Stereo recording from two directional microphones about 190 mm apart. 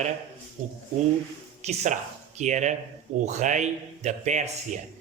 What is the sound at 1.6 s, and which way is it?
A man's voice, 40° right (ahead or behind).